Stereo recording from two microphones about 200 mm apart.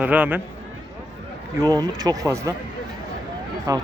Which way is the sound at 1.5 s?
20° right (ahead or behind).